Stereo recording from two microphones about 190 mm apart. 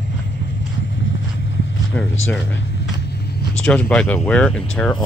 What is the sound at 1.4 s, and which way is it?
Walk, 75° left (ahead or behind).